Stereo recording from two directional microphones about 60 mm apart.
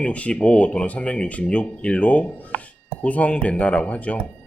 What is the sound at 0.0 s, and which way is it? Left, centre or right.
A man's voice, centre.